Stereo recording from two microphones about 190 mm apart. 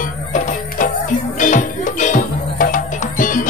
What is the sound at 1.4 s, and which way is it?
Music, 40° left (ahead or behind).